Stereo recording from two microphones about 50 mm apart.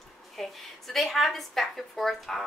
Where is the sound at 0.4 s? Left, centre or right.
Centre.